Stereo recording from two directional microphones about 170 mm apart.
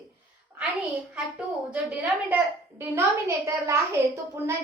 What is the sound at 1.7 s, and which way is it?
A woman's voice, 10° right (ahead or behind).